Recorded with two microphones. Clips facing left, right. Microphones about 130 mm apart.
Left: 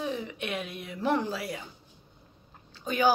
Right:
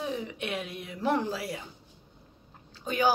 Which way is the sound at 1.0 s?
10° right (ahead or behind).